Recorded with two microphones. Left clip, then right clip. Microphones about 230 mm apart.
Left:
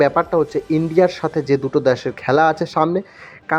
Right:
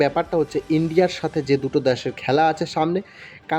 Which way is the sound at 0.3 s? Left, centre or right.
Centre.